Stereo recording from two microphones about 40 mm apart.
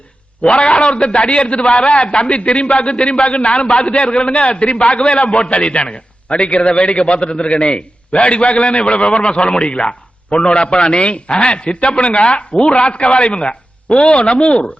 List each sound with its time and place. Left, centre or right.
0.4 s a man's voice: left